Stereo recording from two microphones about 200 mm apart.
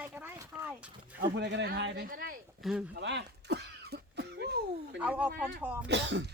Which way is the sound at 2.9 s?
60° right (ahead or behind).